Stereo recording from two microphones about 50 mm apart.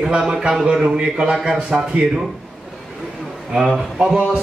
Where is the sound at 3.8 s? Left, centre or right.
Centre.